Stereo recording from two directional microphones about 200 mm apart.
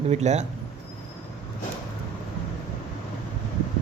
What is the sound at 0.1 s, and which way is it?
Speech, 35° right (ahead or behind).